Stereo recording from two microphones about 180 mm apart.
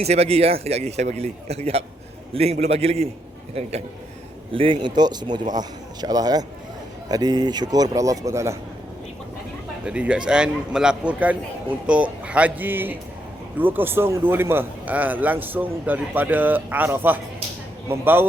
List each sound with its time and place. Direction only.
0.0 s a man's voice: 35° right (ahead or behind); by 8.5 s 15° right (ahead or behind)
9.8 s a man's voice: 5° right (ahead or behind)